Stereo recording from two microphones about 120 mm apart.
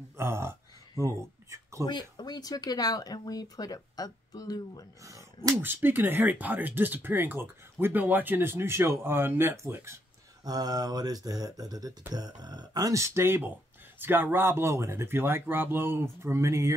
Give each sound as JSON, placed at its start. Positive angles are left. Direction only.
{"t": 0.2, "sound": "speech", "side_deg": -20}
{"t": 1.9, "sound": "speech", "side_deg": 35}
{"t": 5.0, "sound": "speech", "side_deg": -25}
{"t": 5.6, "sound": "speech", "side_deg": -15}
{"t": 10.4, "sound": "mantra", "side_deg": -35}
{"t": 13.9, "sound": "speech", "side_deg": -15}